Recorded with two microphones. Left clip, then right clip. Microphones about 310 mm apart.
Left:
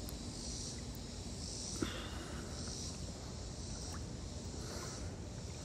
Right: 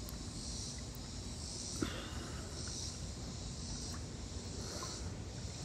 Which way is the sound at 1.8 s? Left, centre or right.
Centre.